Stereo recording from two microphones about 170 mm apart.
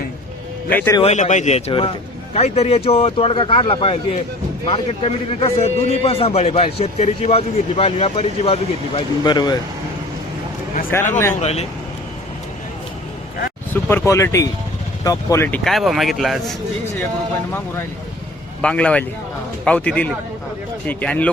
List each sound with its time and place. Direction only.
0.7 s speech: 10° left (ahead or behind)
1.0 s a man's voice: 45° left (ahead or behind); by 9.6 s 25° left (ahead or behind)
10.9 s speech: 15° left (ahead or behind)
11.3 s a man's voice: 40° left (ahead or behind)
13.8 s speech: 15° left (ahead or behind)
15.4 s speech: 5° left (ahead or behind)
18.6 s speech: 5° left (ahead or behind)